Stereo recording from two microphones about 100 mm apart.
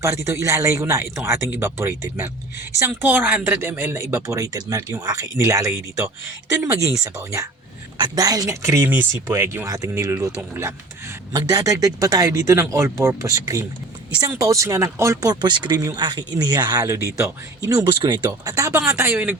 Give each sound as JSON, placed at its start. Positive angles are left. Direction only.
{"t": 0.0, "sound": "speech", "side_deg": -30}
{"t": 7.9, "sound": "speech", "side_deg": -45}
{"t": 11.3, "sound": "speech", "side_deg": -35}
{"t": 16.8, "sound": "speech", "side_deg": -30}
{"t": 18.0, "sound": "speech", "side_deg": -50}
{"t": 18.3, "sound": "speech", "side_deg": -35}
{"t": 19.1, "sound": "speech", "side_deg": -15}